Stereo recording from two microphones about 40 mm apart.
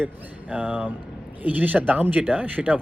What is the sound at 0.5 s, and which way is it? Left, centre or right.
Speech, right.